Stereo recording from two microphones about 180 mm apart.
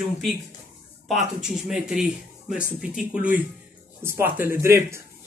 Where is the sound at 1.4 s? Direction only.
5° right (ahead or behind).